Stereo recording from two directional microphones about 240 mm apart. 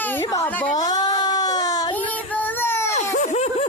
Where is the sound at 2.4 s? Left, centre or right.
Centre.